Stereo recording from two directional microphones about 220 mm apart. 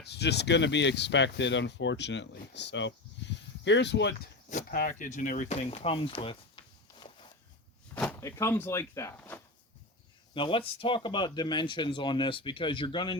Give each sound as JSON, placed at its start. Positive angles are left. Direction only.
{"t": 0.0, "sound": "speech", "side_deg": 50}
{"t": 4.4, "sound": "speech", "side_deg": 40}
{"t": 6.6, "sound": "a sound", "side_deg": 20}
{"t": 8.2, "sound": "speech", "side_deg": 10}
{"t": 10.3, "sound": "speech", "side_deg": 25}